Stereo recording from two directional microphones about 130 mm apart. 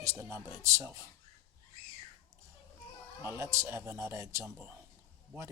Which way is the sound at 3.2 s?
20° right (ahead or behind).